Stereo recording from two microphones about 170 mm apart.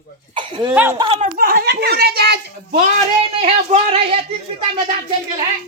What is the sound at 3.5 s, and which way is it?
Speech, 35° right (ahead or behind).